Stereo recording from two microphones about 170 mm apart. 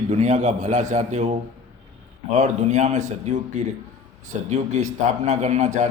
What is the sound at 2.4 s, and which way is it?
A man's voice, 45° right (ahead or behind).